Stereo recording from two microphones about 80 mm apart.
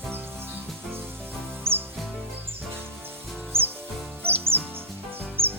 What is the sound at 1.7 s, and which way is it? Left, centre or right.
Music, right.